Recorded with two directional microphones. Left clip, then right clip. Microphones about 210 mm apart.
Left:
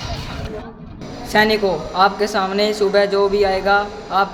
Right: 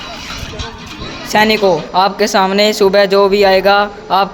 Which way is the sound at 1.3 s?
35° right (ahead or behind).